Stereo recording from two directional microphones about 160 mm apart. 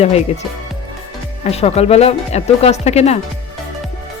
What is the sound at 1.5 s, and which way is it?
Speech, 40° left (ahead or behind).